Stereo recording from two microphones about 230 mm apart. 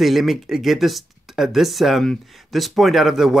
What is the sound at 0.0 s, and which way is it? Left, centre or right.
Speech, centre.